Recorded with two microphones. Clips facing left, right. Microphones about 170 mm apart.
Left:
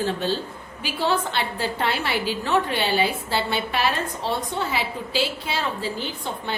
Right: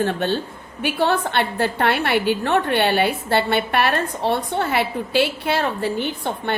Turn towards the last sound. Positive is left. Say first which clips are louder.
# right 5 dB
turn(degrees=-60)  # may be behind; listen again after turning